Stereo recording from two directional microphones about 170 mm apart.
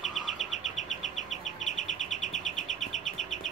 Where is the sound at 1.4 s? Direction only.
45° left (ahead or behind).